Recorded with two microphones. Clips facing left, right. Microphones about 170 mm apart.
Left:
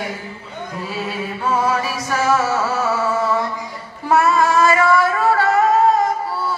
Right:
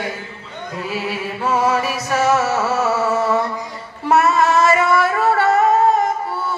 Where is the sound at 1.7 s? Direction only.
30° left (ahead or behind).